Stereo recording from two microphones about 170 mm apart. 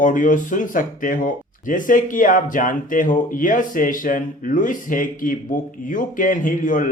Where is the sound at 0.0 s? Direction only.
50° left (ahead or behind).